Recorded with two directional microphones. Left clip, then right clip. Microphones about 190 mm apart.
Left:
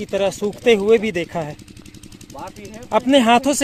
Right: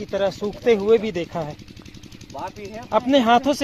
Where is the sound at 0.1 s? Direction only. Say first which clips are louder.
Left 3 dB; 45° left (ahead or behind).